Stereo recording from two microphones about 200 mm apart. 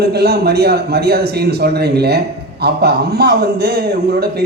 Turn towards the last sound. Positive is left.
turn(degrees=-50)  # may be behind; listen again after turning